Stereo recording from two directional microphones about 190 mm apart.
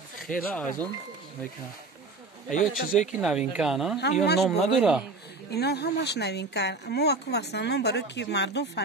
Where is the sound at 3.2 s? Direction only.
5° right (ahead or behind).